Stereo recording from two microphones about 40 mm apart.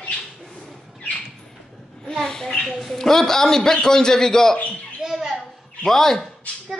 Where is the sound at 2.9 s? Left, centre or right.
Centre.